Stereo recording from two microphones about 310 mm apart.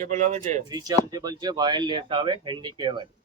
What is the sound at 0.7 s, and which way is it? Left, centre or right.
Speech, centre.